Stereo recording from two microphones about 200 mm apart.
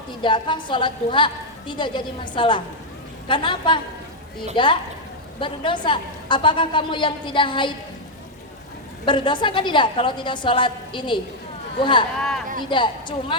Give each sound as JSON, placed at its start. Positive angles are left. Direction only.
{"t": 0.2, "sound": "a woman's voice", "side_deg": 25}
{"t": 9.0, "sound": "a woman's voice", "side_deg": 25}